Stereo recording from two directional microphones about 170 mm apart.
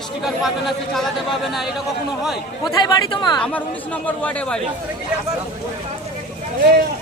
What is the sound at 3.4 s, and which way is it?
Speech, 10° left (ahead or behind).